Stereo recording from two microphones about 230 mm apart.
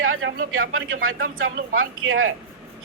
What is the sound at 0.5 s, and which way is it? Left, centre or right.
Speech, right.